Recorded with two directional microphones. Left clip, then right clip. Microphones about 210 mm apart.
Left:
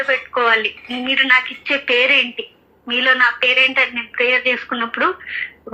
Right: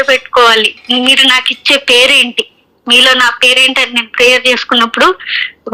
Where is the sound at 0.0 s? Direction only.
40° right (ahead or behind).